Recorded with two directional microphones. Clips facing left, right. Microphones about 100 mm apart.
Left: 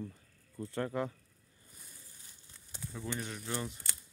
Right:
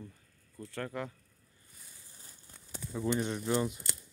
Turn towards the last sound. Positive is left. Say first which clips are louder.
# right 8 dB
turn(degrees=-25)  # may be behind; listen again after turning